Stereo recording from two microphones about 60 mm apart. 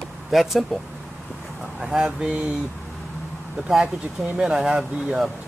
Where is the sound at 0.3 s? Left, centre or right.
Centre.